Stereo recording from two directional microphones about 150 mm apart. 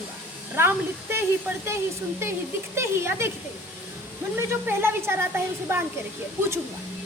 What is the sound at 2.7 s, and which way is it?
Speech, 15° right (ahead or behind).